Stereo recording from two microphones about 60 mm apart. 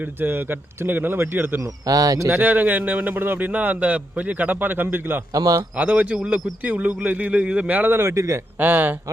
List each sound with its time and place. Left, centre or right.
0.2 s speech: right
1.9 s speech: right
2.3 s a man's voice: right
5.3 s a man's voice: right
5.7 s a man's voice: right
7.9 s a man's voice: right
8.5 s speech: right